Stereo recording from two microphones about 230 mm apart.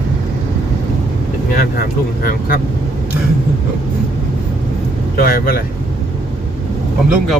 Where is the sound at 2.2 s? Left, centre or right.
Left.